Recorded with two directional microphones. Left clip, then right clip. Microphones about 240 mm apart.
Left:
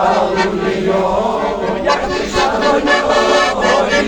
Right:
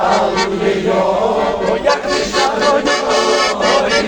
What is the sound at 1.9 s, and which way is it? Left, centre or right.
Music, right.